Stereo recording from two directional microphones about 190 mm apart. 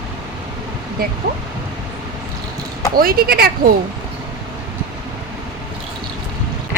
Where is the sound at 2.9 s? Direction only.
50° right (ahead or behind).